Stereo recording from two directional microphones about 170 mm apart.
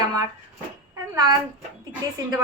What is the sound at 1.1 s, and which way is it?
Speech, 25° right (ahead or behind).